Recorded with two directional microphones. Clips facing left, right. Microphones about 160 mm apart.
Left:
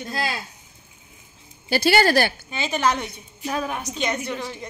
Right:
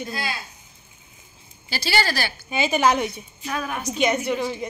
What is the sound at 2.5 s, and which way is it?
Speech, 10° right (ahead or behind).